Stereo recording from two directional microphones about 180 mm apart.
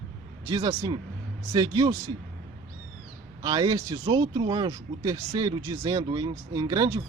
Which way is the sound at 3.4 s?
20° right (ahead or behind).